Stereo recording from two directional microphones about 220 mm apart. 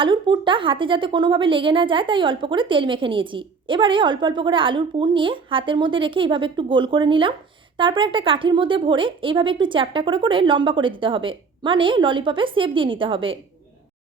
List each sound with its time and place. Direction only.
0.0 s a woman's voice: 20° right (ahead or behind)